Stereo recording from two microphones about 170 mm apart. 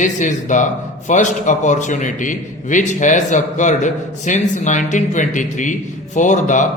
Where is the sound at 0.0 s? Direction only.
45° left (ahead or behind).